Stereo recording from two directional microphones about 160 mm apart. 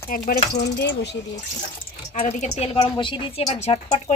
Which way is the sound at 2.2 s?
45° left (ahead or behind).